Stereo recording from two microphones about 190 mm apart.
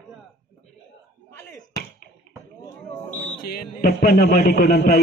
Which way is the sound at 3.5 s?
50° left (ahead or behind).